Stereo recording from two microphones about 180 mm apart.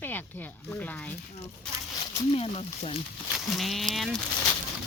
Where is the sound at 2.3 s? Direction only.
35° left (ahead or behind).